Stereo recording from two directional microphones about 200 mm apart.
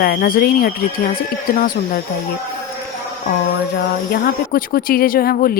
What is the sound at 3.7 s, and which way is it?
A woman's voice, 50° left (ahead or behind).